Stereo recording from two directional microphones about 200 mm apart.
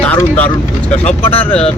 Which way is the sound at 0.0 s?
10° left (ahead or behind).